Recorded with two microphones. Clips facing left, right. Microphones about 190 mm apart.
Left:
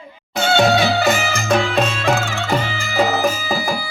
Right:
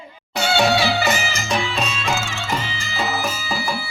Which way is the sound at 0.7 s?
55° left (ahead or behind).